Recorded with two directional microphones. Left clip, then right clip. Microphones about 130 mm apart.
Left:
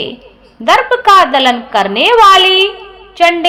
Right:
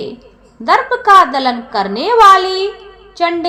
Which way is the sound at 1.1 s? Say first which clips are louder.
Left 2 dB; 50° left (ahead or behind).